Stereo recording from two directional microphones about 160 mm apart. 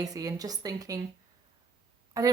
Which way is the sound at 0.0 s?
20° right (ahead or behind).